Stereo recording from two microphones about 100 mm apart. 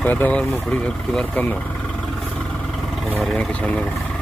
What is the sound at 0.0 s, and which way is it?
Speech, 15° left (ahead or behind).